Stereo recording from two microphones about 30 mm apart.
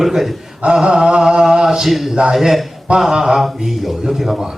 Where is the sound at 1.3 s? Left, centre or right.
Right.